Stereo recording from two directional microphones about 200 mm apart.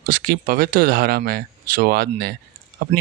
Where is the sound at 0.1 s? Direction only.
45° right (ahead or behind).